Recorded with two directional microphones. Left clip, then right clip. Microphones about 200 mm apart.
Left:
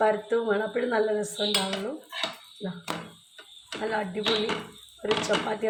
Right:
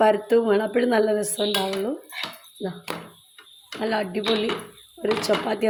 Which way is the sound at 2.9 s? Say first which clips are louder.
Left 2 dB; 5° right (ahead or behind).